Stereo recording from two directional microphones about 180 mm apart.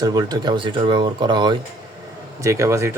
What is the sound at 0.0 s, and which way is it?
Speech, 20° right (ahead or behind).